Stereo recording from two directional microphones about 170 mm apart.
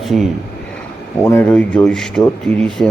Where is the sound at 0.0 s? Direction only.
Centre (ahead or behind).